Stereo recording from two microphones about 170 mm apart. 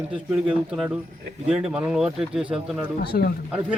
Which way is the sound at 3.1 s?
55° left (ahead or behind).